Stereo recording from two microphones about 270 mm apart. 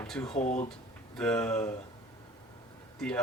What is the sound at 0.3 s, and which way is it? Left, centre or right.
Speech, left.